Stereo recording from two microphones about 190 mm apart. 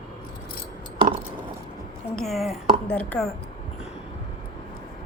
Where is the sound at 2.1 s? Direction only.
Centre (ahead or behind).